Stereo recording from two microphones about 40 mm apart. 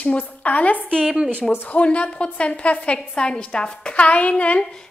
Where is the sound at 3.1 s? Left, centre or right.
Left.